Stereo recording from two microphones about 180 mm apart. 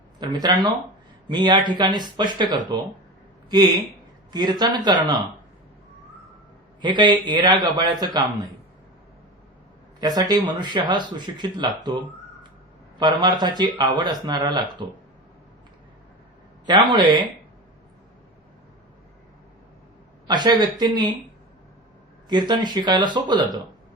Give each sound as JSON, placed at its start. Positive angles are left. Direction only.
{"t": 0.2, "sound": "speech", "side_deg": -20}
{"t": 6.8, "sound": "speech", "side_deg": -25}
{"t": 10.0, "sound": "speech", "side_deg": -20}
{"t": 11.8, "sound": "a sound", "side_deg": -25}
{"t": 13.0, "sound": "speech", "side_deg": -25}
{"t": 16.6, "sound": "speech", "side_deg": -25}
{"t": 20.2, "sound": "speech", "side_deg": -25}
{"t": 22.3, "sound": "speech", "side_deg": -25}